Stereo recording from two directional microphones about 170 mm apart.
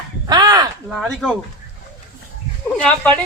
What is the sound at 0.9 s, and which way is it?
Speech, centre (ahead or behind).